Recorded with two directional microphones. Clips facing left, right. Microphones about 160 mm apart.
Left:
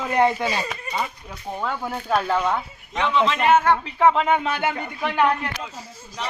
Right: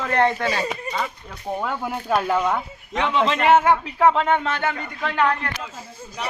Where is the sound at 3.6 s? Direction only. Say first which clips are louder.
Right 1 dB; 5° right (ahead or behind); by 5.5 s 15° left (ahead or behind).